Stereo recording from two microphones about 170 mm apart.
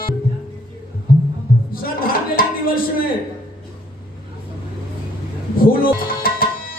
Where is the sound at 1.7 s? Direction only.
60° left (ahead or behind).